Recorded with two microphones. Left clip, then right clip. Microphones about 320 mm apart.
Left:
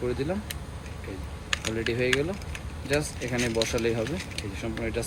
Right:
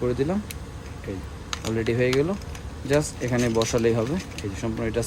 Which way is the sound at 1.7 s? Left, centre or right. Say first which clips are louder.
Right 7 dB; right.